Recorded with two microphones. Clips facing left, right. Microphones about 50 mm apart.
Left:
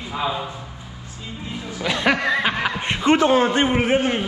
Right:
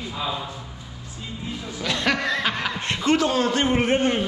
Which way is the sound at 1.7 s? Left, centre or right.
Centre.